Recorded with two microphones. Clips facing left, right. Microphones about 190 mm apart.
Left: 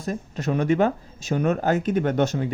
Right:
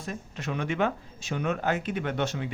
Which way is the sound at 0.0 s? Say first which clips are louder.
Left 8 dB; 40° left (ahead or behind).